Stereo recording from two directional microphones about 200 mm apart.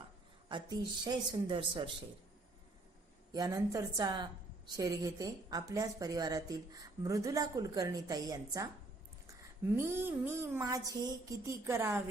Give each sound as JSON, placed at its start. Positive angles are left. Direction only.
{"t": 0.4, "sound": "speech", "side_deg": -20}
{"t": 3.3, "sound": "a woman's voice", "side_deg": -15}
{"t": 9.7, "sound": "a woman's voice", "side_deg": -10}